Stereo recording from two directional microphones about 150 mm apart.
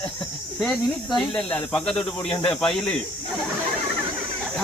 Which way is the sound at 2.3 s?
35° left (ahead or behind).